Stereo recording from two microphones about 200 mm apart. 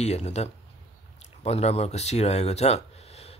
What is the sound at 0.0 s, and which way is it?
Speech, 35° left (ahead or behind).